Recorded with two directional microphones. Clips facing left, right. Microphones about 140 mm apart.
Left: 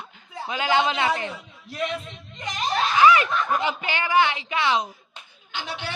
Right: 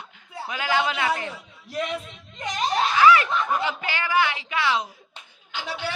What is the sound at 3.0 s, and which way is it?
Speech, 15° left (ahead or behind).